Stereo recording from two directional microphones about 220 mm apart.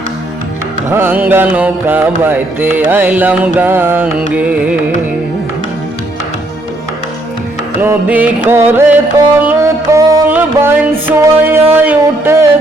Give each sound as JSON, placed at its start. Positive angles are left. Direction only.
{"t": 0.9, "sound": "mantra", "side_deg": -10}
{"t": 7.8, "sound": "mantra", "side_deg": -5}